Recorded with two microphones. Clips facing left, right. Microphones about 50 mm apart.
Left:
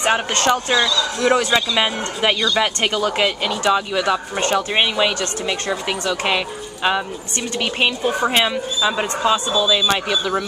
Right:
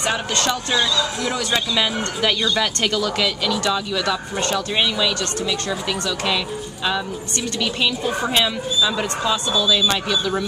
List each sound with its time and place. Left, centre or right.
0.0 s speech: left
1.5 s speech: left